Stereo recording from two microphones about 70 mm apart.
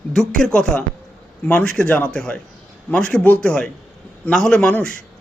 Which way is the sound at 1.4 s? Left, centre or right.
Centre.